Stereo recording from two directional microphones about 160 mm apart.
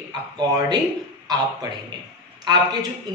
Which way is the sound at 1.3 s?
25° right (ahead or behind).